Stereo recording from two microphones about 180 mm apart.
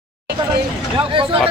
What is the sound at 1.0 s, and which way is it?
Speech, 30° right (ahead or behind).